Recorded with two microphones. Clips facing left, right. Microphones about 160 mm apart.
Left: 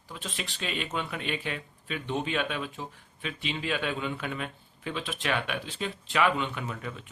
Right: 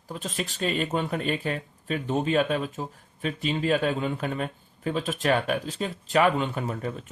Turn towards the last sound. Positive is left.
turn(degrees=-40)  # may be behind; listen again after turning